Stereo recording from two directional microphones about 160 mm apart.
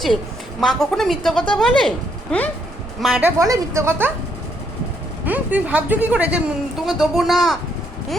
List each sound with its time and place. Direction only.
0.6 s a woman's voice: centre (ahead or behind)
3.2 s speech: 20° right (ahead or behind)
5.2 s a woman's voice: 10° right (ahead or behind)